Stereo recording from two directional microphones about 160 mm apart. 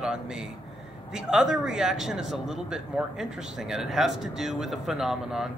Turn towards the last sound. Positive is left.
turn(degrees=0)  # may be behind; listen again after turning